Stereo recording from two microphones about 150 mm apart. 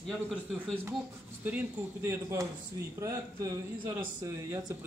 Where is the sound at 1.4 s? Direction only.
15° right (ahead or behind).